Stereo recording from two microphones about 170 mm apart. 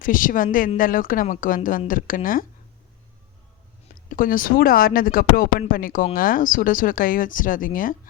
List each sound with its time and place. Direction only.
0.0 s speech: 55° left (ahead or behind)
4.1 s speech: 55° left (ahead or behind)